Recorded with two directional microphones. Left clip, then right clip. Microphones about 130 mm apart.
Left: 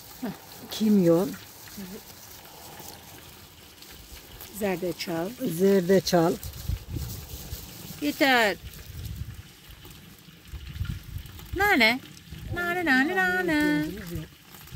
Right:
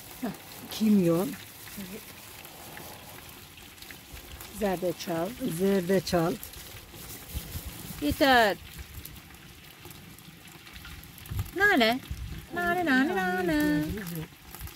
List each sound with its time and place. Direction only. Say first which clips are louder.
0.7 s speech: left 4 dB; 40° left (ahead or behind)
4.6 s speech: even; 15° left (ahead or behind)
5.6 s speech: left 5 dB; 45° left (ahead or behind)
8.0 s speech: even; 15° left (ahead or behind)
11.5 s a sound: left 2 dB; 15° left (ahead or behind)